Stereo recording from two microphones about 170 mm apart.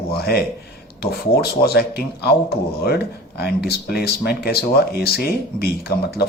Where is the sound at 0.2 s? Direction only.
65° left (ahead or behind).